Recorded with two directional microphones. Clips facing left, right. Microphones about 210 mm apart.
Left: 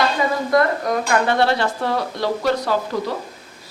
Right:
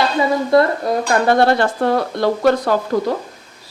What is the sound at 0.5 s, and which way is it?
Speech, 30° right (ahead or behind).